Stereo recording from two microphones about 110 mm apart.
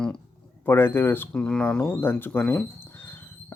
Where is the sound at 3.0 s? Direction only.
20° left (ahead or behind).